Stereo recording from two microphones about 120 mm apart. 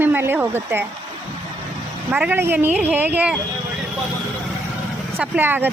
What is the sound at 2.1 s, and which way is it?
A woman's voice, 15° right (ahead or behind).